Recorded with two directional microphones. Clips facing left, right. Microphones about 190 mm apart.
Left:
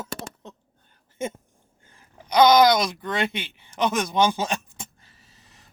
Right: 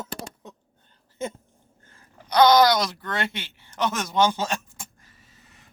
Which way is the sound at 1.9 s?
15° left (ahead or behind).